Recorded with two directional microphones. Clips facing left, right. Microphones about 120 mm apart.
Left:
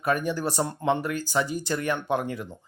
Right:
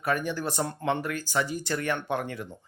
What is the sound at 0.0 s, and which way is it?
Speech, 20° left (ahead or behind).